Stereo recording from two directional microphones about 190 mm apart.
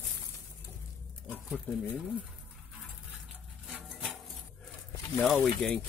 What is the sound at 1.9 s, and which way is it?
Speech, 10° right (ahead or behind).